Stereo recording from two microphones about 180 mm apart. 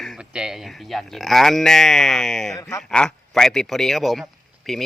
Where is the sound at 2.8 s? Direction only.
5° left (ahead or behind).